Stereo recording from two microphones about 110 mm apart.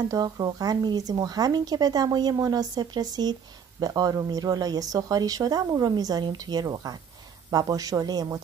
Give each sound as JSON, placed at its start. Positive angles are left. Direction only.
{"t": 0.1, "sound": "speech", "side_deg": -35}